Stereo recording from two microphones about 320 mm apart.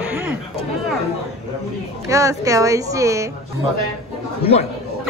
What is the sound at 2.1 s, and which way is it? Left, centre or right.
Speech, centre.